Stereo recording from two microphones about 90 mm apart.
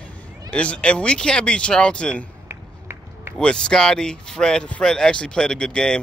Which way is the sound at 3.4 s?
10° left (ahead or behind).